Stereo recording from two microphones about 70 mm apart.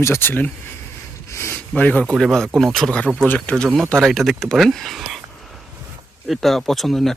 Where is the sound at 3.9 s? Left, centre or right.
Centre.